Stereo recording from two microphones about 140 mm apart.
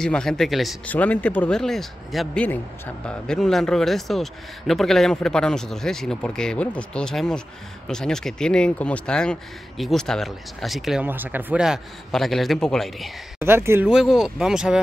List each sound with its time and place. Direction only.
0.0 s a man's voice: 5° left (ahead or behind)
0.8 s a man's voice: 10° left (ahead or behind)
11.1 s a man's voice: 15° right (ahead or behind)
13.4 s speech: 15° right (ahead or behind)
13.8 s a man's voice: 5° right (ahead or behind)